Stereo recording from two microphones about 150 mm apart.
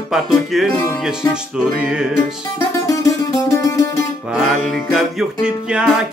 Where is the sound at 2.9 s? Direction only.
20° left (ahead or behind).